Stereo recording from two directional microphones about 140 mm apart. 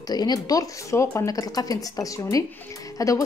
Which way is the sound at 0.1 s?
30° left (ahead or behind).